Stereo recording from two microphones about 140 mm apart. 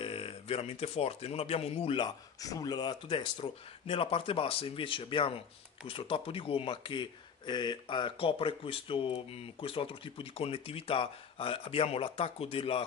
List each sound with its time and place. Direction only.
0.0 s speech: 40° left (ahead or behind)
2.0 s speech: 25° left (ahead or behind); by 12.8 s 40° left (ahead or behind)